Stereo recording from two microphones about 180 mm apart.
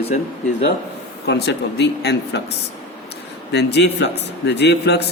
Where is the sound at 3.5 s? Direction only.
70° left (ahead or behind).